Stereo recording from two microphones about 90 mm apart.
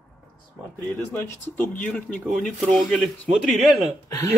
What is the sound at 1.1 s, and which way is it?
Speech, 20° left (ahead or behind).